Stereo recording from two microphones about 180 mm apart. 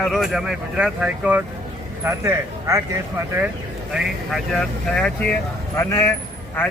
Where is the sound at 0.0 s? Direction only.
Centre (ahead or behind).